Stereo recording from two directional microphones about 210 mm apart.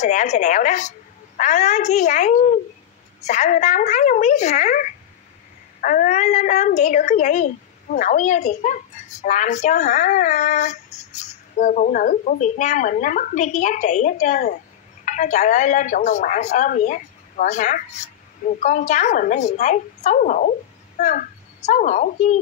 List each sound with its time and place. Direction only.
0.0 s a child's voice: 35° left (ahead or behind)